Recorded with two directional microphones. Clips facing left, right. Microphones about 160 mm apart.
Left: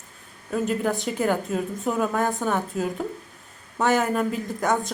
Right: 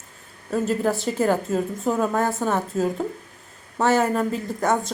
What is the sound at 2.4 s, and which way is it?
Speech, 30° right (ahead or behind).